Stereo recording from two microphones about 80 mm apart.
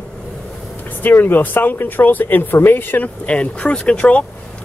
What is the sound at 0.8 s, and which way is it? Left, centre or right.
Speech, left.